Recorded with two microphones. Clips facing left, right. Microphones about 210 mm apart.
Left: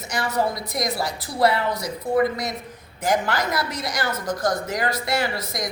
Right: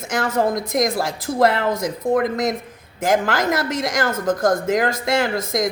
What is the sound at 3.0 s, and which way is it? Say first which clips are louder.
Speech: right 4 dB; 90° right.